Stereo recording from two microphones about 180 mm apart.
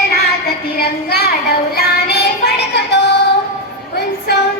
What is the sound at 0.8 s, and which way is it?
Child singing, 65° left (ahead or behind).